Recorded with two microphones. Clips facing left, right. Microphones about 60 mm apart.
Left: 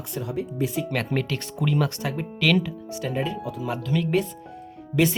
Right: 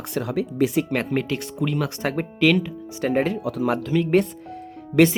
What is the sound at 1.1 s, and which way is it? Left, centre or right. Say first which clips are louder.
Speech: right 3 dB; centre.